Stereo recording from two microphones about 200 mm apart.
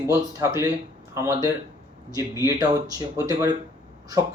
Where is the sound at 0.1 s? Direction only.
15° right (ahead or behind).